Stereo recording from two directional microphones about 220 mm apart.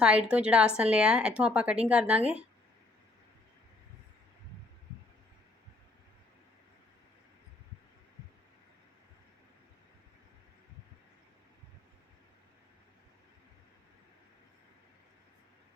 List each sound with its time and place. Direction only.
0.0 s a woman's voice: 5° right (ahead or behind)